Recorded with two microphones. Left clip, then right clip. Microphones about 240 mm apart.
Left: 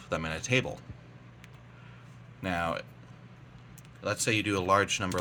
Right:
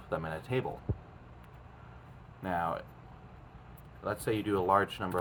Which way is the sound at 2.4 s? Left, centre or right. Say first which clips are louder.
Left 2 dB; left.